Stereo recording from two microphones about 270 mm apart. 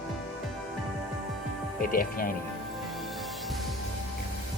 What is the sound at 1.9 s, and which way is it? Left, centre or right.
Speech, left.